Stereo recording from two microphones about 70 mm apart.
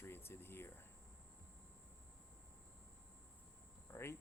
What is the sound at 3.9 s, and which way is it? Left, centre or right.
Speech, left.